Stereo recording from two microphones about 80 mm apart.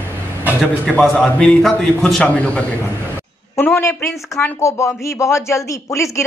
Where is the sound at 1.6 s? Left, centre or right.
Centre.